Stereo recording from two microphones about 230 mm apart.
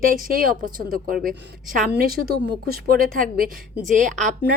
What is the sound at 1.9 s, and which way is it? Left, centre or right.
A woman's voice, right.